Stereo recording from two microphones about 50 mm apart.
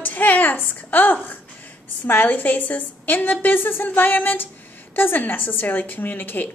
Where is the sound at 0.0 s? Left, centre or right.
Left.